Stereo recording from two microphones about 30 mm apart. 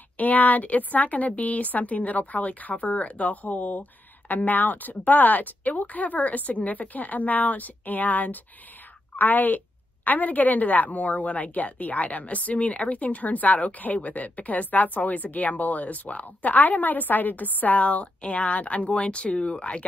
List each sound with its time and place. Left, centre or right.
0.2 s a woman's voice: left
16.5 s a woman's voice: left